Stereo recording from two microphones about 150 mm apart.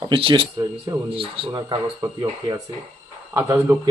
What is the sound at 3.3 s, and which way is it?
Speech, 20° right (ahead or behind).